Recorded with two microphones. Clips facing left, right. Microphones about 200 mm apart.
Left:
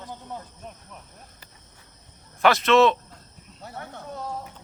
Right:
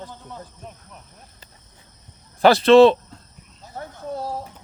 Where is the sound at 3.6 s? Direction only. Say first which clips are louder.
Even; 65° left (ahead or behind).